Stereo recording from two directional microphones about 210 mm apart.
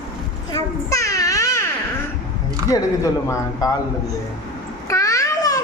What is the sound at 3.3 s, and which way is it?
Speech, 15° left (ahead or behind).